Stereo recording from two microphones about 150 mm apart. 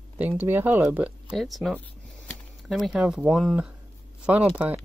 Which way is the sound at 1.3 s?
Centre (ahead or behind).